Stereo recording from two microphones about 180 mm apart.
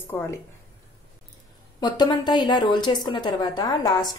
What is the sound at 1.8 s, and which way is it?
A woman's voice, 25° left (ahead or behind).